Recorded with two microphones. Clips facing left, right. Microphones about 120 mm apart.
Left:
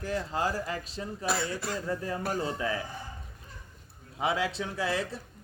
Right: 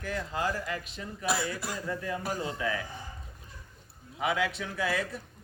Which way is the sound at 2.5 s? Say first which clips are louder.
Left 1 dB; 30° left (ahead or behind).